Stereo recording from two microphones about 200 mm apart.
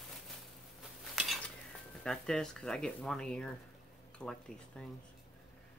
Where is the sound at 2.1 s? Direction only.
5° left (ahead or behind).